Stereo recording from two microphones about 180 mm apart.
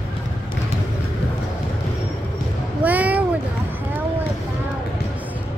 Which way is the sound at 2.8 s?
10° right (ahead or behind).